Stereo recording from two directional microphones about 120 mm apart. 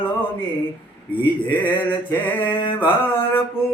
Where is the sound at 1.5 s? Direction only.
15° left (ahead or behind).